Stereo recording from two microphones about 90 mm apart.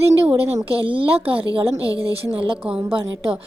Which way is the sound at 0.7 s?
75° right (ahead or behind).